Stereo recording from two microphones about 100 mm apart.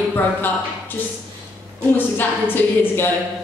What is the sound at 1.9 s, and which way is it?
Speech, 20° left (ahead or behind).